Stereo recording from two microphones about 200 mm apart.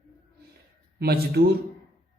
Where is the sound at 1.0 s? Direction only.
55° right (ahead or behind).